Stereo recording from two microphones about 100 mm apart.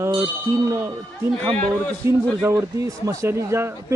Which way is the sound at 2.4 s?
30° right (ahead or behind).